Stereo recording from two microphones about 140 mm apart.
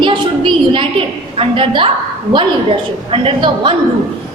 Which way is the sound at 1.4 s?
40° right (ahead or behind).